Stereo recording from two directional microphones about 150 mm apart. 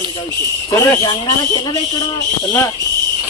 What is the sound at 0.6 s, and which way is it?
Speech, 20° left (ahead or behind).